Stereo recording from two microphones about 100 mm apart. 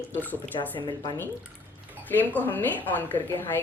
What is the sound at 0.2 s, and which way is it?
Speech, 15° left (ahead or behind).